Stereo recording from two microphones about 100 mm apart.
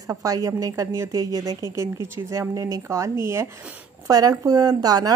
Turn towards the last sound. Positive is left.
turn(degrees=-40)  # may be behind; listen again after turning